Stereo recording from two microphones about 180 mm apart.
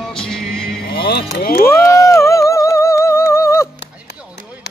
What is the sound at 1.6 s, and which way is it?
Music, 15° left (ahead or behind).